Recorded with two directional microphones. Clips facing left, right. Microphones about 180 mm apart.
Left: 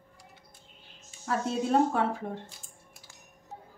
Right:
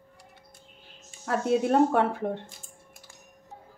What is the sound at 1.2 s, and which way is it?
Speech, 60° right (ahead or behind).